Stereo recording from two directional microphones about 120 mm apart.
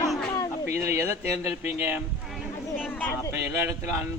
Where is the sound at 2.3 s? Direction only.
5° right (ahead or behind).